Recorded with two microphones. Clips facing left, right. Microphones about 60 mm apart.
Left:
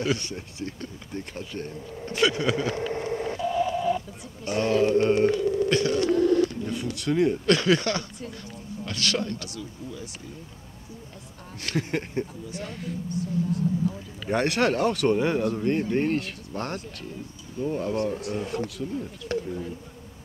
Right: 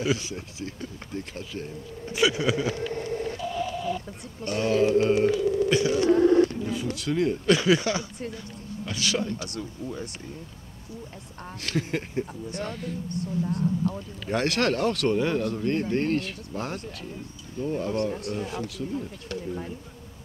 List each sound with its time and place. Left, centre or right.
0.0 s speech: centre
2.9 s a sound: left
3.3 s a sound: centre
4.5 s speech: centre
5.7 s speech: centre
6.1 s a sound: centre
6.6 s speech: centre
7.4 s a man's voice: centre
9.6 s speech: right
11.6 s speech: centre
13.1 s speech: right
14.2 s speech: centre